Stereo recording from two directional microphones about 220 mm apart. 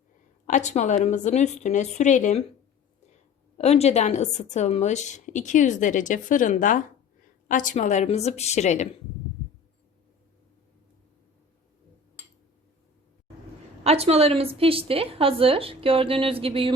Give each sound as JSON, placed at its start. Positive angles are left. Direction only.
{"t": 0.4, "sound": "a woman's voice", "side_deg": 35}
{"t": 3.6, "sound": "a woman's voice", "side_deg": 30}
{"t": 13.8, "sound": "a woman's voice", "side_deg": -30}